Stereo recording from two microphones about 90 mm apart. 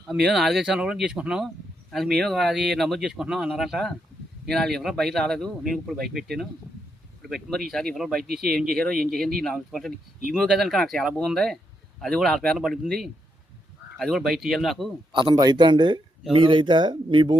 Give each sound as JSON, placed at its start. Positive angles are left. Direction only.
{"t": 0.1, "sound": "speech", "side_deg": -5}
{"t": 15.1, "sound": "speech", "side_deg": -65}
{"t": 16.3, "sound": "speech", "side_deg": -70}